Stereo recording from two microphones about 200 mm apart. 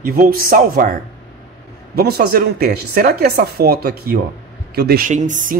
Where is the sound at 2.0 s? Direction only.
50° right (ahead or behind).